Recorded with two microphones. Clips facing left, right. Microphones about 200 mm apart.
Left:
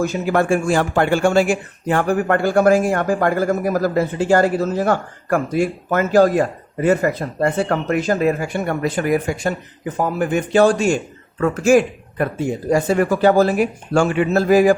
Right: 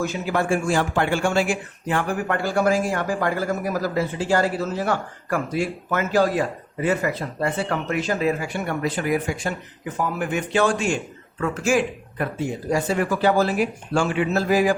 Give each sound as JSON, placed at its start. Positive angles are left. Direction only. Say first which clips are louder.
{"t": 0.0, "sound": "speech", "louder": "left 5 dB", "side_deg": 50}